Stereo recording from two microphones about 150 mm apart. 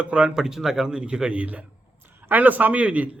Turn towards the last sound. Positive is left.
turn(degrees=-10)  # may be behind; listen again after turning